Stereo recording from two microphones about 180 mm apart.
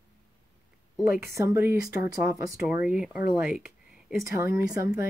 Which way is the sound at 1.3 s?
15° right (ahead or behind).